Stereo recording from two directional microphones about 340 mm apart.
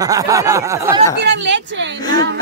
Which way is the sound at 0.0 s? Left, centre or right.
Centre.